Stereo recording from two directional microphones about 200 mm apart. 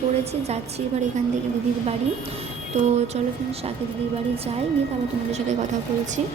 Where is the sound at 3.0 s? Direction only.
30° right (ahead or behind).